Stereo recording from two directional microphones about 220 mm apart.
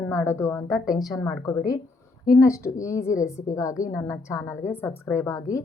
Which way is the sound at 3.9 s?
10° left (ahead or behind).